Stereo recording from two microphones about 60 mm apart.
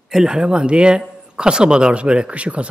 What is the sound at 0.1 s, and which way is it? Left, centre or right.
Speech, centre.